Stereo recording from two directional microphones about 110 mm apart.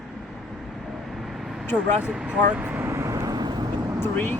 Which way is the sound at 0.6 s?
Centre (ahead or behind).